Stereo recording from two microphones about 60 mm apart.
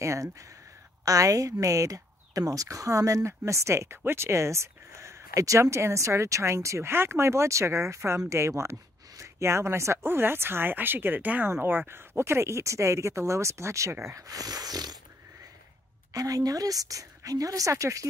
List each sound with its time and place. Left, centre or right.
0.0 s speech: right
1.0 s speech: right
14.0 s speech: right
16.1 s a woman's voice: right